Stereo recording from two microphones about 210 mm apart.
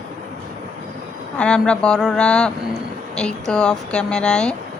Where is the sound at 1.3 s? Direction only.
5° left (ahead or behind).